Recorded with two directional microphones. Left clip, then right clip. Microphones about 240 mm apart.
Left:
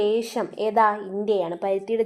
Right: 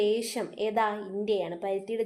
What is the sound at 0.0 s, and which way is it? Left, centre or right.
A woman's voice, left.